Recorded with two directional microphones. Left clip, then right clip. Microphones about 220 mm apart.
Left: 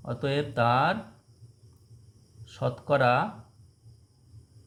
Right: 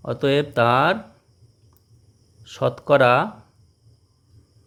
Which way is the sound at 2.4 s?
50° right (ahead or behind).